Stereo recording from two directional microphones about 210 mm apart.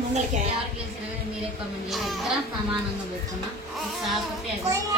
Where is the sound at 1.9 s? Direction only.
Centre (ahead or behind).